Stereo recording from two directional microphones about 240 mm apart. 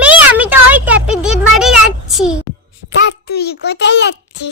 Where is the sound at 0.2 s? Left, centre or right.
Centre.